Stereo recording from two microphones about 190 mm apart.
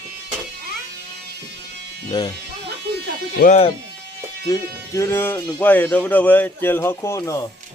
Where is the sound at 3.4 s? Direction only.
45° left (ahead or behind).